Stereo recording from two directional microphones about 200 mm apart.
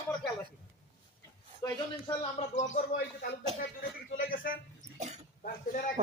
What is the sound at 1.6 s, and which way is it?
A man's voice, 25° left (ahead or behind).